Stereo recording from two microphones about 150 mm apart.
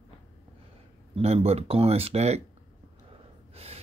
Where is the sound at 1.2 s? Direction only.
45° right (ahead or behind).